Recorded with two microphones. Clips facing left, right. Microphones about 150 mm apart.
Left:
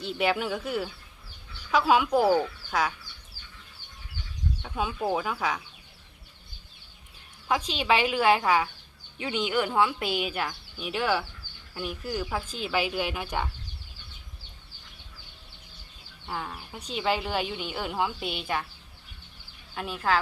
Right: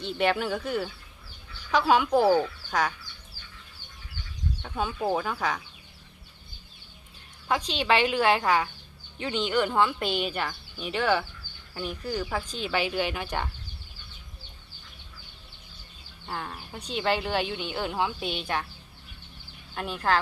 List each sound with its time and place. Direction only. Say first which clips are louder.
0.0 s a woman's voice: right 1 dB; 5° left (ahead or behind)
4.8 s a woman's voice: right 1 dB; 5° left (ahead or behind)
7.4 s a woman's voice: even; 5° left (ahead or behind)
16.2 s a woman's voice: left 1 dB; 5° left (ahead or behind)
19.7 s a woman's voice: right 1 dB; 5° left (ahead or behind)